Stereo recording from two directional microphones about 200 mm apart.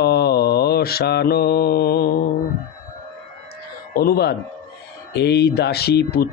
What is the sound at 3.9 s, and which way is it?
Mantra, 50° left (ahead or behind).